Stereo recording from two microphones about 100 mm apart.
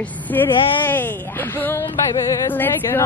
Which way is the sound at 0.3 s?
20° left (ahead or behind).